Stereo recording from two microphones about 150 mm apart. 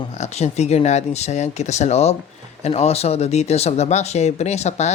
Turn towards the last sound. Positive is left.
turn(degrees=50)  # may be behind; listen again after turning